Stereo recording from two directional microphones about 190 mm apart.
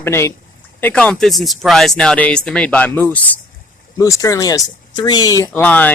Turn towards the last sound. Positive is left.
turn(degrees=10)  # may be behind; listen again after turning